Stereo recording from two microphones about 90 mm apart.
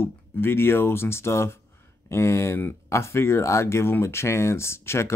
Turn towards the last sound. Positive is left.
turn(degrees=30)  # may be behind; listen again after turning